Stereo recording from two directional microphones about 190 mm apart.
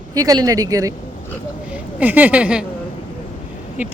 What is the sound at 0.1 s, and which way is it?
Speech, 20° right (ahead or behind).